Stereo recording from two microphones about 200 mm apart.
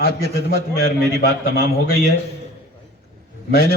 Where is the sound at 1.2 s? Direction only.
50° left (ahead or behind).